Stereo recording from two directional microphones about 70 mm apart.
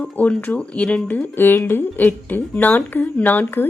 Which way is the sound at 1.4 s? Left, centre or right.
Left.